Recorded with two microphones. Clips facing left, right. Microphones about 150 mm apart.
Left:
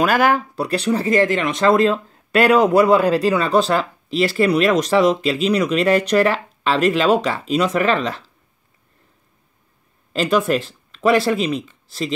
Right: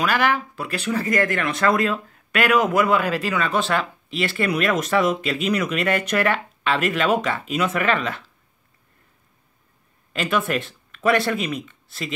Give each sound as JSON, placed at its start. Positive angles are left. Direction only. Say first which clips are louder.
{"t": 0.0, "sound": "speech", "louder": "left 5 dB", "side_deg": 45}
{"t": 10.1, "sound": "speech", "louder": "left 5 dB", "side_deg": 35}